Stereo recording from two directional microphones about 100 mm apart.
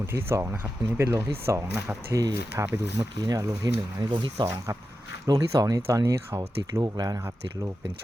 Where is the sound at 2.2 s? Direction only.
35° right (ahead or behind).